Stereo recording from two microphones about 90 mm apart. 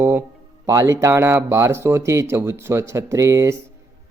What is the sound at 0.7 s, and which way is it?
Speech, 35° right (ahead or behind).